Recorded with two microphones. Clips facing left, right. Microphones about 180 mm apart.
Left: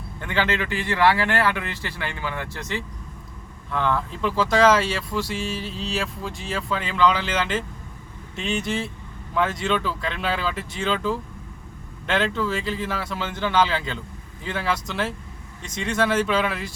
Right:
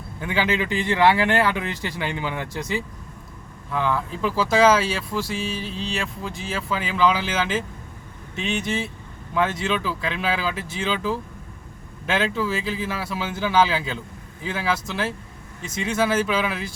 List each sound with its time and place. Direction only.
0.2 s speech: 10° right (ahead or behind)